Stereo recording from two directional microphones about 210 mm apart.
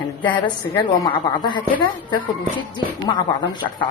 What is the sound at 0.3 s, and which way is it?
A woman's voice, 20° left (ahead or behind).